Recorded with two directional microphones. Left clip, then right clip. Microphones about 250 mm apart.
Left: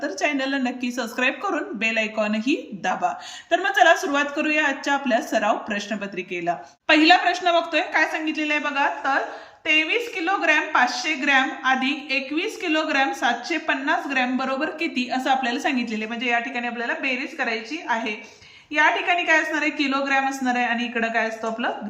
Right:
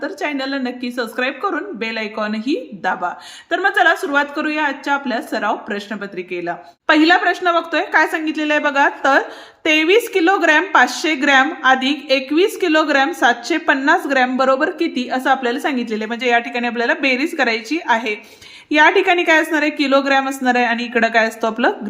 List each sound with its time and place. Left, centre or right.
0.0 s a woman's voice: centre; by 21.7 s right